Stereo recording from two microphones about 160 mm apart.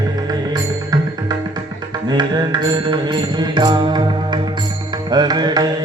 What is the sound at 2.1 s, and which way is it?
Music, 25° right (ahead or behind).